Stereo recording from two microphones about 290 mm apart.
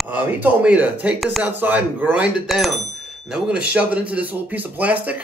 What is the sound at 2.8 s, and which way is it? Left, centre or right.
Speech, right.